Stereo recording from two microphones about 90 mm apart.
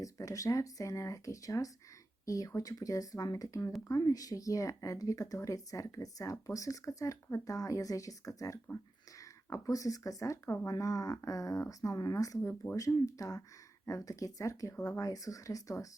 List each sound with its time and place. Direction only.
0.0 s speech: 40° left (ahead or behind)